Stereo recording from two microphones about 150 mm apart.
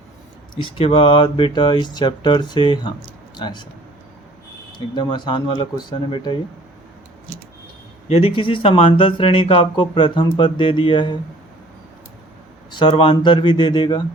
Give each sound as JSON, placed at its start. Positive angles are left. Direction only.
{"t": 0.5, "sound": "speech", "side_deg": 35}
{"t": 4.9, "sound": "speech", "side_deg": 30}
{"t": 8.0, "sound": "speech", "side_deg": 40}
{"t": 12.7, "sound": "speech", "side_deg": 35}